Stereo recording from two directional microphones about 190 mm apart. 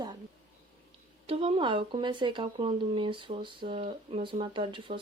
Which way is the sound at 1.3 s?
30° right (ahead or behind).